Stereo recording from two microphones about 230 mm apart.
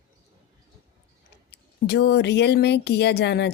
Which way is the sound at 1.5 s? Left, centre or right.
Left.